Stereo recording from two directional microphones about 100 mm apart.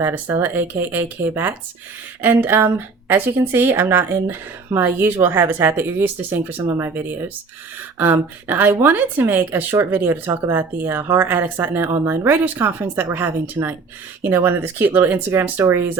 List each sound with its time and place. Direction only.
0.0 s a woman's voice: 20° right (ahead or behind)